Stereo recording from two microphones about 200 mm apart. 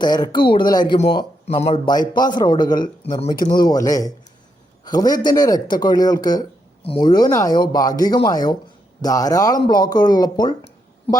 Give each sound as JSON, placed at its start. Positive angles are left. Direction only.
{"t": 0.0, "sound": "speech", "side_deg": 20}